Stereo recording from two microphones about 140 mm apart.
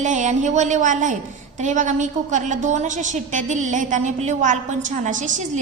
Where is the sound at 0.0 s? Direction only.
60° right (ahead or behind).